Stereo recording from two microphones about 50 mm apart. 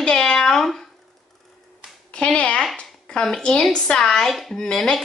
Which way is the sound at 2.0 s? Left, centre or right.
Left.